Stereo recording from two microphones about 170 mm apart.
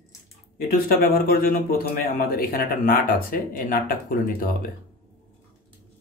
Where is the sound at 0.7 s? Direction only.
60° left (ahead or behind).